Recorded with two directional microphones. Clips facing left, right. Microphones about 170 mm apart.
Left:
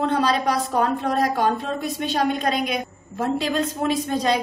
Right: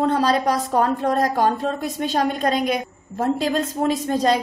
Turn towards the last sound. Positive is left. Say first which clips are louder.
# right 2 dB
turn(degrees=-40)  # may be behind; listen again after turning